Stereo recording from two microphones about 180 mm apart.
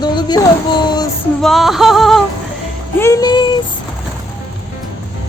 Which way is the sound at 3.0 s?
20° left (ahead or behind).